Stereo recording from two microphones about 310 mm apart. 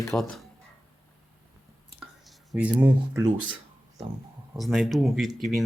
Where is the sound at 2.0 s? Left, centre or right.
Centre.